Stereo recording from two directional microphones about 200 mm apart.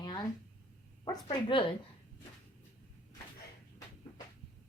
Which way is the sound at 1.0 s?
20° left (ahead or behind).